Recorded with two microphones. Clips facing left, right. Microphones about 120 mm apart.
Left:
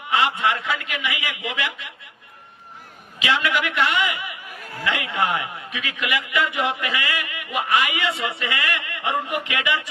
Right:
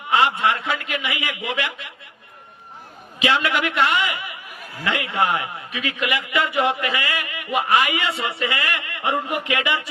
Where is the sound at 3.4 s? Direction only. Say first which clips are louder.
Right 1 dB; 30° right (ahead or behind).